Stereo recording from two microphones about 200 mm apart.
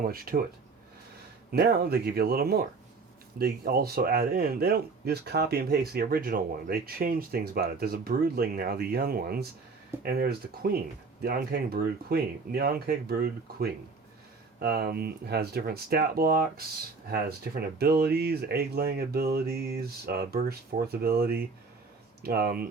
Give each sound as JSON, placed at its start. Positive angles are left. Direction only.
{"t": 0.0, "sound": "speech", "side_deg": -45}
{"t": 1.5, "sound": "speech", "side_deg": -50}